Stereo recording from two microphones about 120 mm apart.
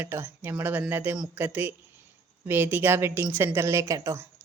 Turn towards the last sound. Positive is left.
turn(degrees=-25)  # may be behind; listen again after turning